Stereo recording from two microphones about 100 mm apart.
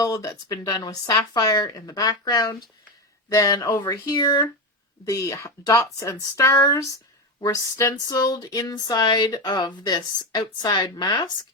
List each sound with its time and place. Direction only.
0.0 s speech: 35° left (ahead or behind)
8.1 s speech: 40° left (ahead or behind)